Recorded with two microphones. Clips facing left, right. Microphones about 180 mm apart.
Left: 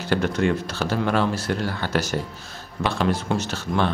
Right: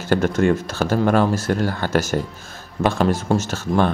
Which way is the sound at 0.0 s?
45° right (ahead or behind).